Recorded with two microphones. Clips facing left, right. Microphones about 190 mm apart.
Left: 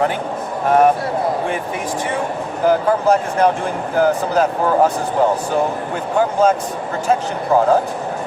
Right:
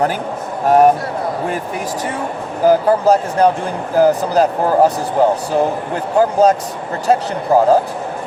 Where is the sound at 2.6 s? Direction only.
35° right (ahead or behind).